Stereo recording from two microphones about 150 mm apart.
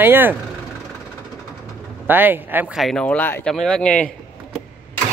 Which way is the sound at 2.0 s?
15° right (ahead or behind).